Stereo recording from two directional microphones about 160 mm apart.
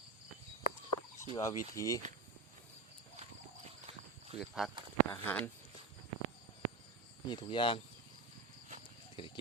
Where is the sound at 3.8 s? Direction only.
40° right (ahead or behind).